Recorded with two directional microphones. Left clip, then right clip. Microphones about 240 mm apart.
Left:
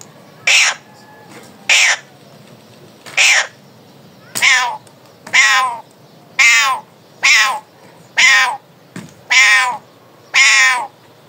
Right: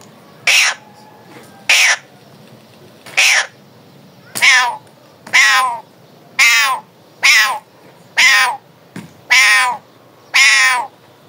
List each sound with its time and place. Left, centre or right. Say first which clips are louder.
0.4 s bird: even; centre
3.2 s bird: even; centre
4.4 s cat: right 2 dB; centre
5.3 s crow: right 1 dB; centre
9.0 s crow: even; centre
9.3 s cat: even; centre